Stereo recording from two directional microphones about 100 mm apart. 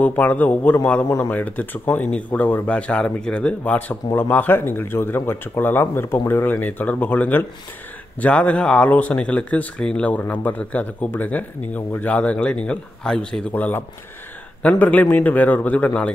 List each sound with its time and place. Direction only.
0.0 s speech: 15° left (ahead or behind)
1.0 s speech: 25° left (ahead or behind)
1.3 s speech: 15° left (ahead or behind)